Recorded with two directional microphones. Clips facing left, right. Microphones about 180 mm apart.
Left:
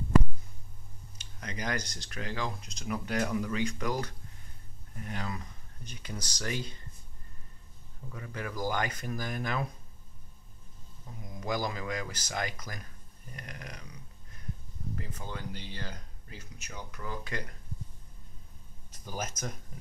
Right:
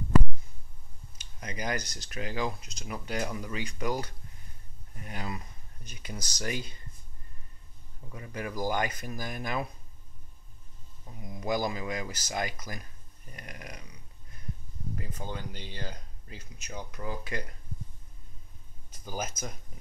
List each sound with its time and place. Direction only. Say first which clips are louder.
1.4 s speech: right 1 dB; 10° right (ahead or behind)
8.1 s speech: right 2 dB; 15° right (ahead or behind)
11.2 s speech: right 3 dB; 10° right (ahead or behind)
15.0 s speech: right 3 dB; 20° right (ahead or behind)
19.0 s speech: right 1 dB; 5° right (ahead or behind)